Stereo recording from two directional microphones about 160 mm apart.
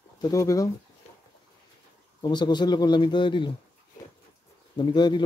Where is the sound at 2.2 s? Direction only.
25° left (ahead or behind).